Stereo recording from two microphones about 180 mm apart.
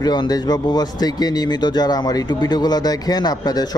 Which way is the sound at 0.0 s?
20° left (ahead or behind).